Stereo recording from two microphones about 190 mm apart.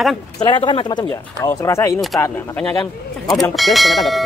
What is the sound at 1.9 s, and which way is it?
Speech, centre (ahead or behind).